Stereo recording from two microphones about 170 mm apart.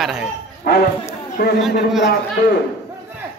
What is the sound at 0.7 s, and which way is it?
Speech, 65° left (ahead or behind).